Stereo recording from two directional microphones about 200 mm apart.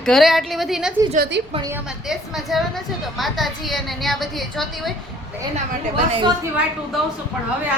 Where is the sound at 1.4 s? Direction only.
55° right (ahead or behind).